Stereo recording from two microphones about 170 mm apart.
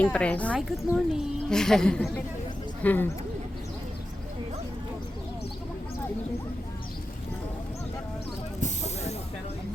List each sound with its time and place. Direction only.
0.0 s a woman's voice: 10° left (ahead or behind)
8.6 s hiss: 40° left (ahead or behind)